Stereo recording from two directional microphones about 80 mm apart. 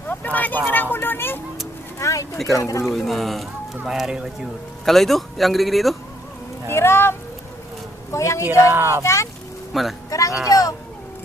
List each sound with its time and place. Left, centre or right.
0.1 s a sound: left
2.0 s a sound: left
2.6 s a woman's voice: left
2.9 s speech: centre
4.9 s speech: centre
6.7 s a woman's voice: left
8.7 s speech: right
9.0 s a woman's voice: left
9.7 s speech: centre
10.1 s a child's voice: left